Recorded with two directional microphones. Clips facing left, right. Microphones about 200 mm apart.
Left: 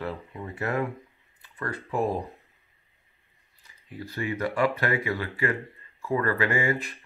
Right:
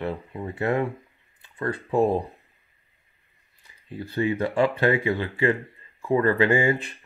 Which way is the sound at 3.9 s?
30° right (ahead or behind).